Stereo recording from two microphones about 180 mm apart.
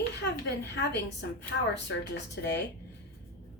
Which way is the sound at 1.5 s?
80° left.